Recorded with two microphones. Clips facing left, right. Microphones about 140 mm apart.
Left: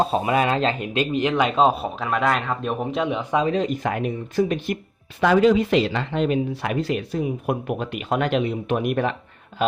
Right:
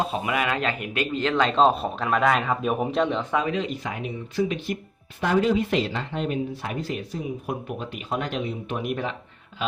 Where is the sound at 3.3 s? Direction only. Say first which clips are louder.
Left 5 dB; 30° left (ahead or behind).